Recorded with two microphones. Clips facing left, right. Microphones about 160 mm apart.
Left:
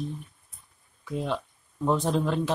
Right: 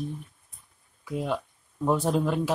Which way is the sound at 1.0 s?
10° right (ahead or behind).